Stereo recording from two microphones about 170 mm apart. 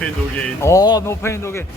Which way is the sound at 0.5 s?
15° left (ahead or behind).